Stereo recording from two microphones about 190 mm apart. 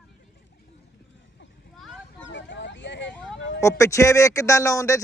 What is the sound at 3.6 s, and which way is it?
A man's voice, 15° left (ahead or behind).